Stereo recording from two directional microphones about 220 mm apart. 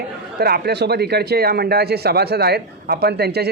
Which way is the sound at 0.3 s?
45° right (ahead or behind).